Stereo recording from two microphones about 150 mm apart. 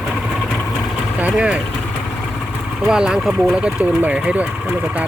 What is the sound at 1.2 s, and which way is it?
Speech, 10° right (ahead or behind).